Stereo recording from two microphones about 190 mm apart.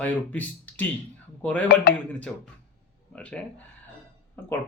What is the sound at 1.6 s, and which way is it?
Speech, 55° left (ahead or behind).